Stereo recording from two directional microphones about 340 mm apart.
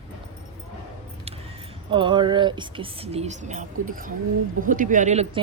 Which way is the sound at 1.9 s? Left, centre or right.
Centre.